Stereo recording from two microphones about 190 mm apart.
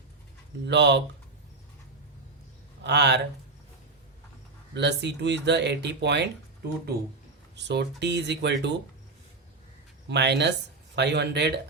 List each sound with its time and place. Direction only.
0.7 s speech: 65° right (ahead or behind)
2.8 s speech: 65° right (ahead or behind)
4.7 s speech: 65° right (ahead or behind)
7.5 s speech: 65° right (ahead or behind)
10.1 s speech: 65° right (ahead or behind)